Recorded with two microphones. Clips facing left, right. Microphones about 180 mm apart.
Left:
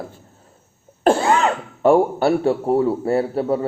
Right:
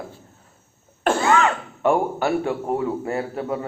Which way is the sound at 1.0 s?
35° left (ahead or behind).